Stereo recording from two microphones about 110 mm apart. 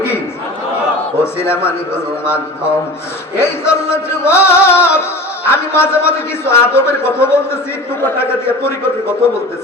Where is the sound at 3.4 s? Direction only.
25° left (ahead or behind).